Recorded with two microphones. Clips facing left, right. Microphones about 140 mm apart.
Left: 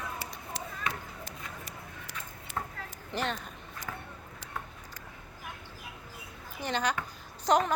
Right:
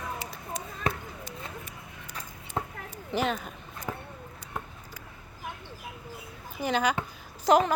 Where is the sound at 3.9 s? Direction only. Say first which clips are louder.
Right 6 dB; 20° right (ahead or behind).